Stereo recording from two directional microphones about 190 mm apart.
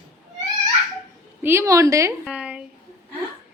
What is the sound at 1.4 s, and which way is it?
Speech, 15° right (ahead or behind).